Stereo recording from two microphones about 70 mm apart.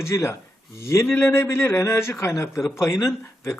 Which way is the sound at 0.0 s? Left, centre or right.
Left.